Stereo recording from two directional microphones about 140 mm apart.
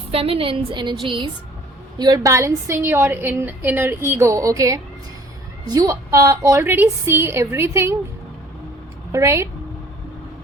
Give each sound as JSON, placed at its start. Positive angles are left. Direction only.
{"t": 0.1, "sound": "a woman's voice", "side_deg": -45}
{"t": 9.1, "sound": "a woman's voice", "side_deg": -20}